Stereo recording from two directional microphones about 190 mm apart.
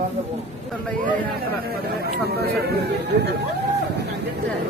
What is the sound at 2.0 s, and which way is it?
Speech, 55° right (ahead or behind).